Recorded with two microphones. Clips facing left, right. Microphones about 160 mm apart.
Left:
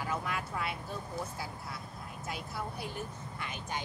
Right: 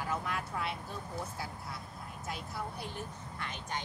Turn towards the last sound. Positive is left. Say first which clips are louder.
# left 1 dB
turn(degrees=10)  # may be behind; listen again after turning